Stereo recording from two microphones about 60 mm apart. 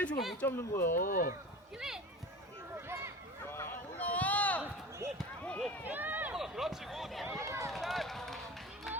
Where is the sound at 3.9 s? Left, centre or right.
Left.